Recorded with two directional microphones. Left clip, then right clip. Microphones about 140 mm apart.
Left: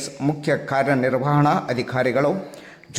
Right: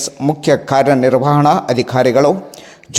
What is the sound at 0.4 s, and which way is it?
A man's voice, 40° right (ahead or behind).